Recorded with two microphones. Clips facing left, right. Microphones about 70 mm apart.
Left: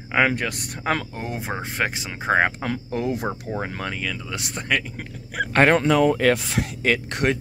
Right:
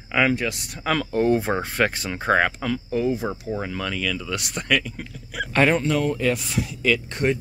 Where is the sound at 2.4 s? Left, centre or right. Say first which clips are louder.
Even; left.